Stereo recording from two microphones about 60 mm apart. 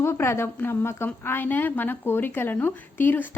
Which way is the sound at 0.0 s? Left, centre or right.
Left.